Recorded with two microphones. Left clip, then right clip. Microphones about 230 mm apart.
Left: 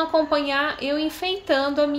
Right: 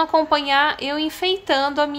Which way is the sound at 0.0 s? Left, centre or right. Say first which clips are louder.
Right 3 dB; centre.